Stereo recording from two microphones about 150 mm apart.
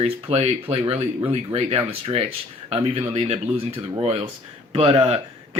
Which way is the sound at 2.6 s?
40° right (ahead or behind).